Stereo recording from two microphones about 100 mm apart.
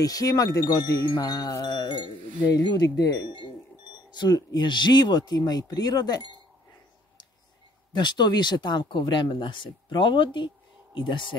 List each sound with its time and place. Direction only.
0.0 s wind chime: 35° left (ahead or behind)
4.1 s speech: 45° left (ahead or behind)
7.9 s speech: 50° left (ahead or behind)